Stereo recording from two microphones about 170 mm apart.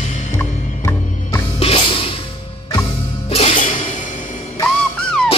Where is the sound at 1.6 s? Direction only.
35° left (ahead or behind).